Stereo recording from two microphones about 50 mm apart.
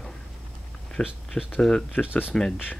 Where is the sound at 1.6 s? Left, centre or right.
Centre.